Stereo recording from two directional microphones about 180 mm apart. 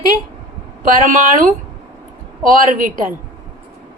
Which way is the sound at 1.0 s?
50° right (ahead or behind).